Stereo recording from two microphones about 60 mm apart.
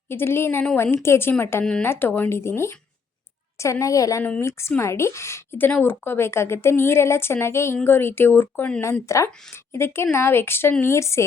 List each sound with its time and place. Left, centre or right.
0.1 s a woman's voice: left
2.3 s a woman's voice: left
3.6 s a woman's voice: left
4.4 s a woman's voice: left
5.5 s a woman's voice: left
7.9 s speech: left
8.8 s a woman's voice: left
9.7 s a woman's voice: left
10.9 s a woman's voice: left